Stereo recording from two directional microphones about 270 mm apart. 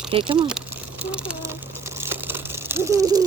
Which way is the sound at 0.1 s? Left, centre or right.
Centre.